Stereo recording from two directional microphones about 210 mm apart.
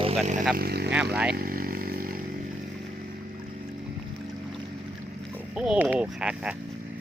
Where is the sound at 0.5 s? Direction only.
50° right (ahead or behind).